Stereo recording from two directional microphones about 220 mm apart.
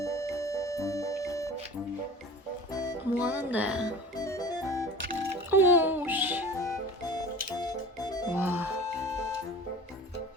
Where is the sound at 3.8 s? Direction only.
15° left (ahead or behind).